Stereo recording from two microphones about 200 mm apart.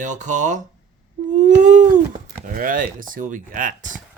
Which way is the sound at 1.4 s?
40° right (ahead or behind).